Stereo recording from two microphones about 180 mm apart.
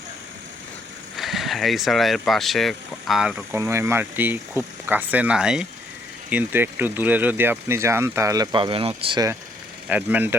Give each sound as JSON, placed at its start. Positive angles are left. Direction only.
{"t": 1.1, "sound": "speech", "side_deg": 0}
{"t": 9.9, "sound": "speech", "side_deg": -10}